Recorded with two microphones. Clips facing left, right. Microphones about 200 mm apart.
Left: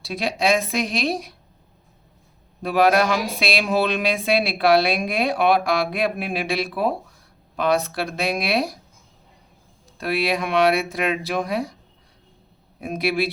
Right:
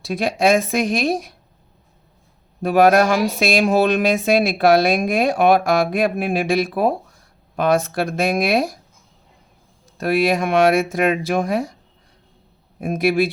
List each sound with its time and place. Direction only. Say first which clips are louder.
0.0 s a woman's voice: right 5 dB; 50° right (ahead or behind)
2.6 s a woman's voice: right 4 dB; 45° right (ahead or behind)
10.0 s a woman's voice: right 5 dB; 45° right (ahead or behind)
12.8 s a woman's voice: right 5 dB; 50° right (ahead or behind)